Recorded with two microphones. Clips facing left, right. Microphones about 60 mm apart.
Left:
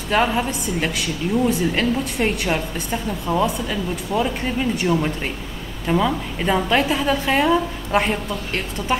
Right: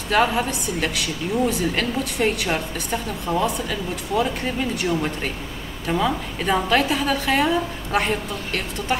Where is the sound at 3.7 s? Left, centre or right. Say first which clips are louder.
Left 2 dB; centre.